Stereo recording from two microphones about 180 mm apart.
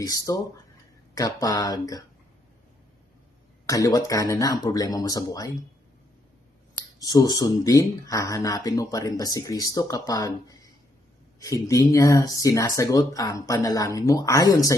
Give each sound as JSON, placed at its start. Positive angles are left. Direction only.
{"t": 0.0, "sound": "speech", "side_deg": 20}
{"t": 3.7, "sound": "speech", "side_deg": 20}
{"t": 7.0, "sound": "speech", "side_deg": 20}